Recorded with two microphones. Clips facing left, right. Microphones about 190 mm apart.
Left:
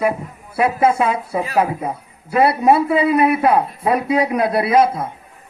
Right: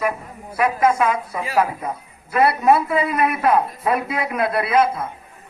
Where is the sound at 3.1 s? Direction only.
30° left (ahead or behind).